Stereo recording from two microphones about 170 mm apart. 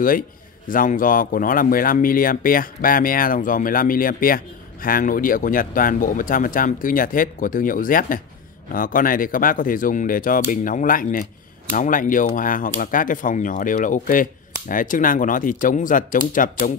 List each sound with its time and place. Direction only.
0.7 s speech: 55° left (ahead or behind)